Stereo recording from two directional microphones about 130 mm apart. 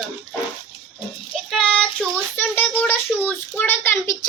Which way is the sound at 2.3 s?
15° left (ahead or behind).